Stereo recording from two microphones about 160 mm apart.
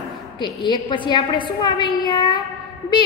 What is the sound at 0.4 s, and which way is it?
A woman's voice, 30° left (ahead or behind).